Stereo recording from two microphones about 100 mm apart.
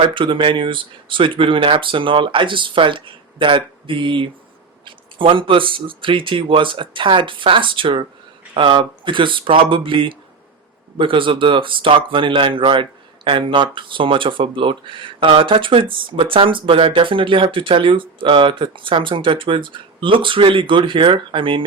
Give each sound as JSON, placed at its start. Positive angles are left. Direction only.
{"t": 0.0, "sound": "speech", "side_deg": -55}